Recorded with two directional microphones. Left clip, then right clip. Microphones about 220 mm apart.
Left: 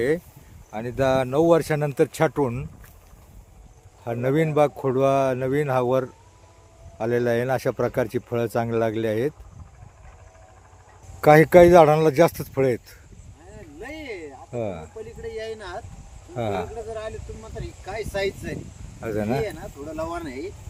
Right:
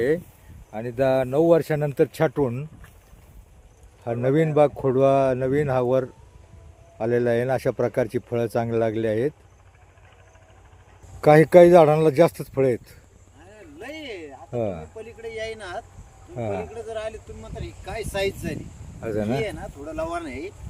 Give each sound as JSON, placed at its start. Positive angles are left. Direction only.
{"t": 0.7, "sound": "speech", "side_deg": 0}
{"t": 4.0, "sound": "speech", "side_deg": -10}
{"t": 11.2, "sound": "speech", "side_deg": 0}
{"t": 13.8, "sound": "a sound", "side_deg": -25}
{"t": 14.5, "sound": "speech", "side_deg": -10}
{"t": 14.9, "sound": "speech", "side_deg": -30}
{"t": 16.3, "sound": "speech", "side_deg": 10}
{"t": 16.9, "sound": "speech", "side_deg": -30}
{"t": 17.6, "sound": "speech", "side_deg": -50}
{"t": 19.0, "sound": "speech", "side_deg": -5}
{"t": 19.5, "sound": "speech", "side_deg": -30}